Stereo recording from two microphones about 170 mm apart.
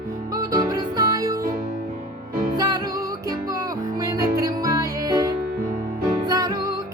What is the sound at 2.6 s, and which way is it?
Music, 25° right (ahead or behind).